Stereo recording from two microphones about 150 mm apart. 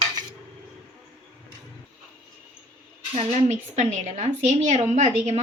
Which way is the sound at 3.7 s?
50° right (ahead or behind).